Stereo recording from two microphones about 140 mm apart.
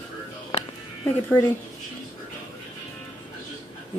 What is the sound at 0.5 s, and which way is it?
Music, 45° left (ahead or behind).